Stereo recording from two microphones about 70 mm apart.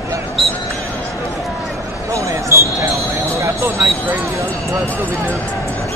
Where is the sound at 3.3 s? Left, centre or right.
Right.